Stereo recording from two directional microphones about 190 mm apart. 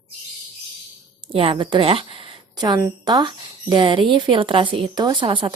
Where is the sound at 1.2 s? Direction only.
30° right (ahead or behind).